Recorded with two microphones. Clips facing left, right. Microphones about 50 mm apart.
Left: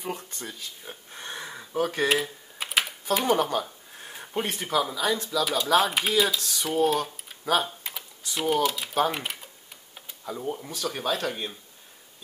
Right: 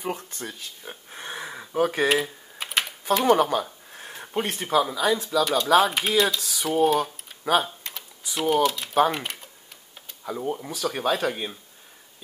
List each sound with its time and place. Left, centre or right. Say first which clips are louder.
0.0 s speech: right 3 dB; centre
8.6 s speech: right 4 dB; centre
10.2 s speech: right 3 dB; centre